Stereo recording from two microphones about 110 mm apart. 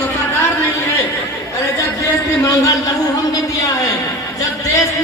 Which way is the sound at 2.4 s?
30° left (ahead or behind).